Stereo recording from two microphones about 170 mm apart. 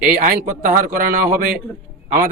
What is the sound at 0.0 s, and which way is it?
A man's voice, 55° right (ahead or behind).